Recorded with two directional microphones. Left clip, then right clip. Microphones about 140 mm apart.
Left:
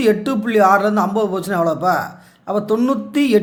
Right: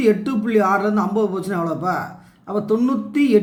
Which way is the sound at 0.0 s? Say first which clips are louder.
Left 2 dB; 35° left (ahead or behind).